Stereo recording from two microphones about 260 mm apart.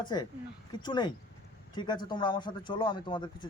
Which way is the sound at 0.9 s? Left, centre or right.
Centre.